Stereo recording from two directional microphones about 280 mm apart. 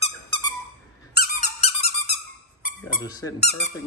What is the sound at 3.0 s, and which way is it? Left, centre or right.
Speech, centre.